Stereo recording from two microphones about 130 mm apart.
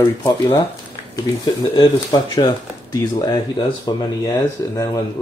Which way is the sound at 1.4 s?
40° left (ahead or behind).